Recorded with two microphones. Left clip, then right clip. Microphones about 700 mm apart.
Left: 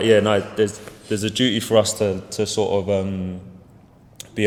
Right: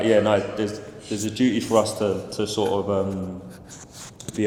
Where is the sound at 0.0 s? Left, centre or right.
Left.